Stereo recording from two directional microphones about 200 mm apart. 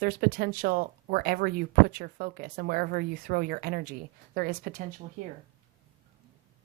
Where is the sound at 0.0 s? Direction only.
50° right (ahead or behind).